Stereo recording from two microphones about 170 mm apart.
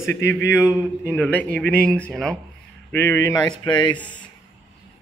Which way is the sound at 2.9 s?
15° left (ahead or behind).